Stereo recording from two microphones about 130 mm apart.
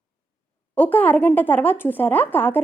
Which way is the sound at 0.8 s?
15° left (ahead or behind).